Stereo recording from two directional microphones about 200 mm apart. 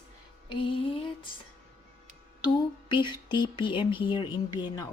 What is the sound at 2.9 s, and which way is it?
Speech, 25° left (ahead or behind).